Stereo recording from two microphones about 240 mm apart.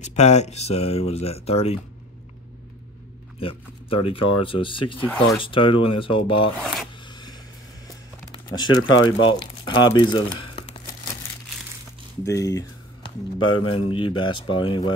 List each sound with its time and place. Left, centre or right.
0.0 s speech: left
3.3 s speech: left
5.0 s speech: centre
5.4 s speech: left
6.6 s speech: centre
7.1 s a sound: centre
8.7 s speech: left
9.2 s speech: centre
12.3 s a sound: centre
13.4 s speech: left
13.7 s speech: left